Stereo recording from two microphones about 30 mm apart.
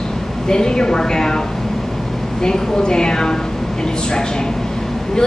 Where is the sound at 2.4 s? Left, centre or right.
Left.